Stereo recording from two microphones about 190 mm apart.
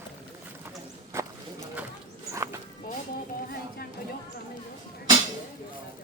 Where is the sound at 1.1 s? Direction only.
15° right (ahead or behind).